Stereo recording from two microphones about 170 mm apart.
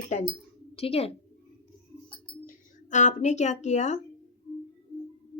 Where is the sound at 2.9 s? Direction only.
45° left (ahead or behind).